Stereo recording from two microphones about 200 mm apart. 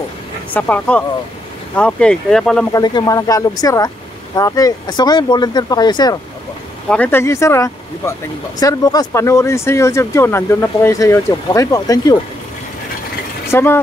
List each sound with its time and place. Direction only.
0.5 s speech: 10° left (ahead or behind)
2.7 s speech: 20° left (ahead or behind)
6.9 s speech: 10° left (ahead or behind)
13.5 s speech: 10° left (ahead or behind)